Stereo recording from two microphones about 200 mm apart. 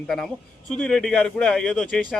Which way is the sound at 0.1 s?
Centre (ahead or behind).